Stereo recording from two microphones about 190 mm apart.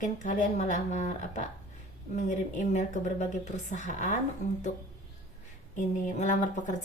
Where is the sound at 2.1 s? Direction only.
40° left (ahead or behind).